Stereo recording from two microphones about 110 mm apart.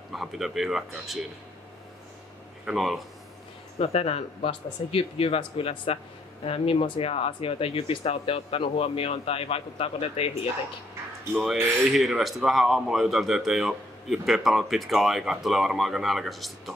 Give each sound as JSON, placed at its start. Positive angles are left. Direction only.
{"t": 0.1, "sound": "speech", "side_deg": 0}
{"t": 2.6, "sound": "speech", "side_deg": 0}
{"t": 3.7, "sound": "speech", "side_deg": 65}
{"t": 11.9, "sound": "speech", "side_deg": 0}